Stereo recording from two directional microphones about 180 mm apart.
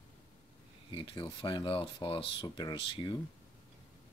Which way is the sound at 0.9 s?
30° left (ahead or behind).